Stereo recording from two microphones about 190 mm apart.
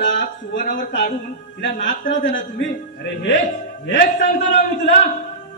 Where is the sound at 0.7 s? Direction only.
70° left (ahead or behind).